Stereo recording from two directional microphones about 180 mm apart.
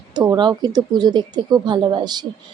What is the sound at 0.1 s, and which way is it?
Speech, 25° right (ahead or behind).